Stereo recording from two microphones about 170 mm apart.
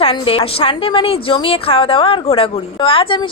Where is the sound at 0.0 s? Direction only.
35° left (ahead or behind).